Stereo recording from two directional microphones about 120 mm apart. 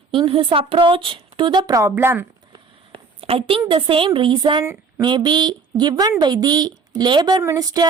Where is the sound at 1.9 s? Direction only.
20° right (ahead or behind).